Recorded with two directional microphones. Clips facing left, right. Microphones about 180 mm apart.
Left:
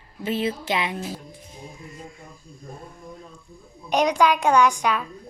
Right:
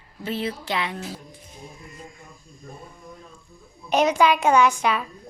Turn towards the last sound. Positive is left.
turn(degrees=-5)  # may be behind; listen again after turning